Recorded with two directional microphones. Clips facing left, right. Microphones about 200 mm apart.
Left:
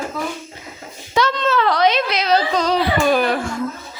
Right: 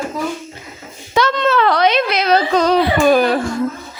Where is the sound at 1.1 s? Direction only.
60° right (ahead or behind).